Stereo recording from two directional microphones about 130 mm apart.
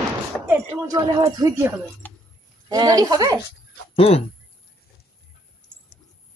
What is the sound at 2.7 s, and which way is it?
Speech, 30° right (ahead or behind).